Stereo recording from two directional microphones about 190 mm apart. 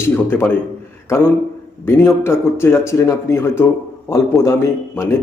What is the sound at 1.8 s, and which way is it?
A man's voice, 15° left (ahead or behind).